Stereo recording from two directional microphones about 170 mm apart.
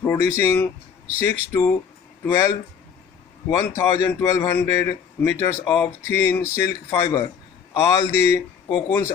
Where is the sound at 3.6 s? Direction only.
15° left (ahead or behind).